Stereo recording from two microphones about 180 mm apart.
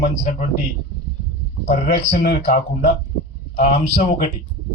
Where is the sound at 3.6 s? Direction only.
45° left (ahead or behind).